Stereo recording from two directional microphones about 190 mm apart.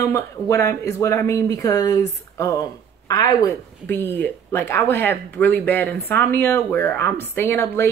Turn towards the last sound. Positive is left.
turn(degrees=15)  # may be behind; listen again after turning